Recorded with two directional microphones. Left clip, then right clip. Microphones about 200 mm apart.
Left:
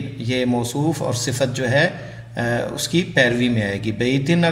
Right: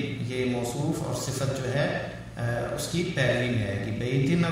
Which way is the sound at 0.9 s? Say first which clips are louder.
Left 8 dB; 30° left (ahead or behind).